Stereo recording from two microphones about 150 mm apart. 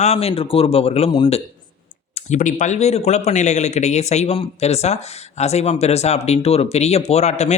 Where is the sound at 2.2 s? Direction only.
50° left (ahead or behind).